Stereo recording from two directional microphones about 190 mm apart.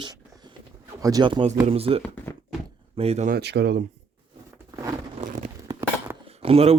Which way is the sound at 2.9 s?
30° right (ahead or behind).